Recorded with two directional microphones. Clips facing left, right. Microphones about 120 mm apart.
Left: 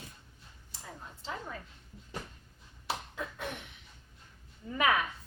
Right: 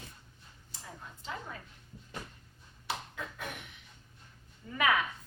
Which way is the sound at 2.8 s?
30° left (ahead or behind).